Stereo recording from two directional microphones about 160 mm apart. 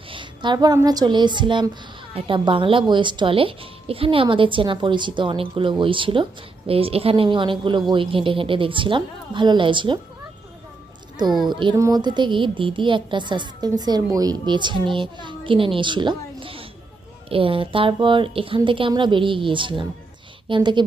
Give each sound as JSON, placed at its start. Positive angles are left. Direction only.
{"t": 0.1, "sound": "a woman's voice", "side_deg": -30}
{"t": 11.4, "sound": "a woman's voice", "side_deg": -25}